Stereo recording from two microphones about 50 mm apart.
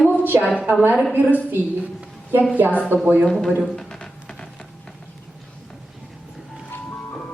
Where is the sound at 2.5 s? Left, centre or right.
Right.